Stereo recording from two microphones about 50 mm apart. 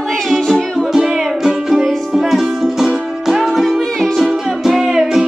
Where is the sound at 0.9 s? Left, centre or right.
Centre.